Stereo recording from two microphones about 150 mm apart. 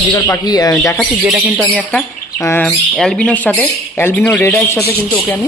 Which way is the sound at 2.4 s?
10° left (ahead or behind).